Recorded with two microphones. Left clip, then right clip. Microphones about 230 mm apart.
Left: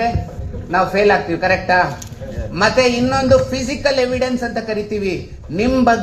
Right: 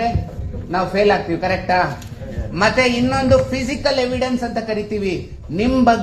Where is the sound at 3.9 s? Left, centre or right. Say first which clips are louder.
Left 2 dB; left.